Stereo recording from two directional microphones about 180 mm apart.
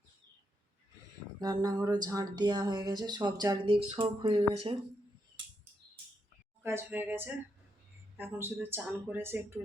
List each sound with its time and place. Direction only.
1.4 s speech: 20° right (ahead or behind)
6.6 s speech: 10° right (ahead or behind)